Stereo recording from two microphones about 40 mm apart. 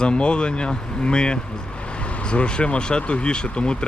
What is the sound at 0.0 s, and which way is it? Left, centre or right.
Speech, left.